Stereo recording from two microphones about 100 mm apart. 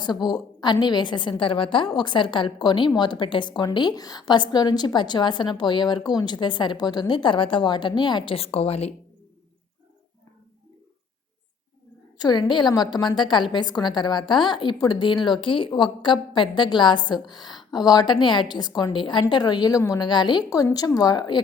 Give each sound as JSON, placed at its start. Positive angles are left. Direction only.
{"t": 0.3, "sound": "a woman's voice", "side_deg": 45}
{"t": 12.1, "sound": "a woman's voice", "side_deg": 45}